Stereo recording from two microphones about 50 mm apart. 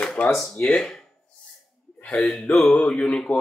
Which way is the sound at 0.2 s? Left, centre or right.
Left.